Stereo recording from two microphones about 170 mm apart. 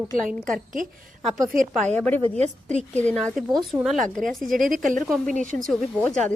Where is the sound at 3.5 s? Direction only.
25° right (ahead or behind).